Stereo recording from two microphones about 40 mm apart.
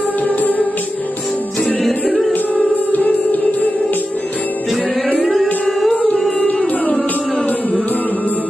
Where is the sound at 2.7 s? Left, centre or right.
Left.